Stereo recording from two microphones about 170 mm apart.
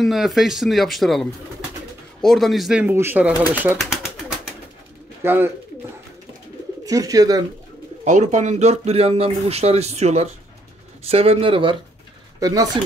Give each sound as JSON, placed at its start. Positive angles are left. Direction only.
{"t": 0.0, "sound": "speech", "side_deg": 0}
{"t": 5.2, "sound": "speech", "side_deg": -15}
{"t": 6.9, "sound": "speech", "side_deg": -20}
{"t": 8.0, "sound": "speech", "side_deg": -45}
{"t": 12.4, "sound": "speech", "side_deg": -20}